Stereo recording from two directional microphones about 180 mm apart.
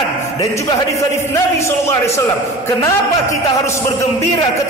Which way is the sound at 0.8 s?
15° left (ahead or behind).